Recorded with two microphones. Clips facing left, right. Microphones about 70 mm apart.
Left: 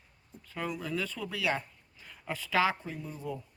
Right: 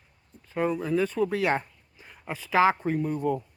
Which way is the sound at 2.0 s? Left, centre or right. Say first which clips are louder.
Right 2 dB; right.